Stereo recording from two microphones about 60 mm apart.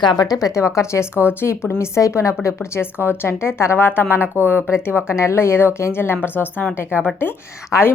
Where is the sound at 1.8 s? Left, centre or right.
Left.